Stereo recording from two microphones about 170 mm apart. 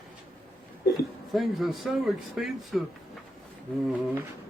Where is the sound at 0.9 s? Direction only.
Centre (ahead or behind).